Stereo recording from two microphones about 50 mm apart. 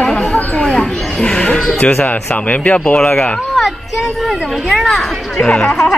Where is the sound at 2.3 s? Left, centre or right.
Left.